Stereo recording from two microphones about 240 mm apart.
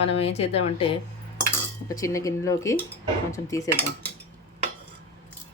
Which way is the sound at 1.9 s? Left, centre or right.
Centre.